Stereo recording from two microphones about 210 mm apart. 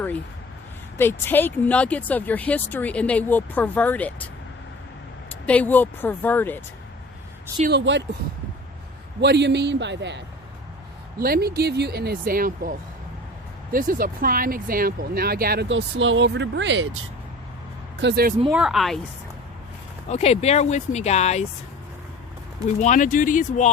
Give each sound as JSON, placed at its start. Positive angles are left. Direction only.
{"t": 0.9, "sound": "speech", "side_deg": 10}
{"t": 5.3, "sound": "speech", "side_deg": 5}
{"t": 7.7, "sound": "speech", "side_deg": -55}
{"t": 9.2, "sound": "speech", "side_deg": -55}
{"t": 13.7, "sound": "speech", "side_deg": -40}
{"t": 15.7, "sound": "speech", "side_deg": -65}
{"t": 18.0, "sound": "speech", "side_deg": -50}
{"t": 18.5, "sound": "a woman's voice", "side_deg": 0}
{"t": 20.1, "sound": "speech", "side_deg": 30}
{"t": 22.8, "sound": "speech", "side_deg": 35}